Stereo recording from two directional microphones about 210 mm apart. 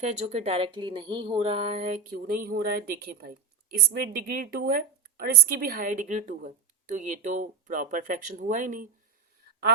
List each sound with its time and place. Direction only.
0.1 s a woman's voice: 35° right (ahead or behind)